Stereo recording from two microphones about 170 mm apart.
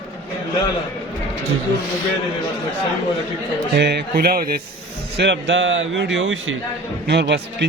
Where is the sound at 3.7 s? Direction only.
75° right (ahead or behind); by 4.6 s 60° right (ahead or behind).